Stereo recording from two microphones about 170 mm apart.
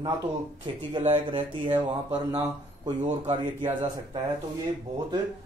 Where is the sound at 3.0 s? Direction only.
40° right (ahead or behind).